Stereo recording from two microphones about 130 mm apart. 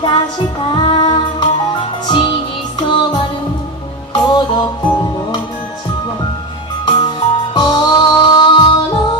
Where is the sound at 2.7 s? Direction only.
35° left (ahead or behind).